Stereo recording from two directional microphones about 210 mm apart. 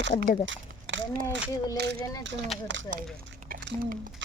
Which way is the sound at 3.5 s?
40° right (ahead or behind).